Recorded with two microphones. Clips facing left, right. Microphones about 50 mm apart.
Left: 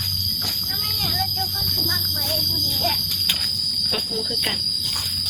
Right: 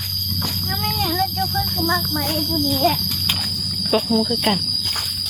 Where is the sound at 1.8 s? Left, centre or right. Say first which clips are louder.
Right 9 dB; right.